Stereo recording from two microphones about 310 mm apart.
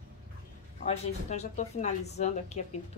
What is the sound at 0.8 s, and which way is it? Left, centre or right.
Speech, left.